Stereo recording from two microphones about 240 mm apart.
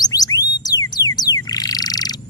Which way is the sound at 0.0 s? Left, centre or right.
Centre.